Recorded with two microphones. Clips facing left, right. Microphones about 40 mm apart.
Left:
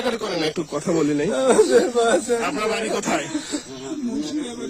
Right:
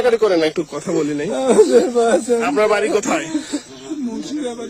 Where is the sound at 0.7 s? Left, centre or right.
Right.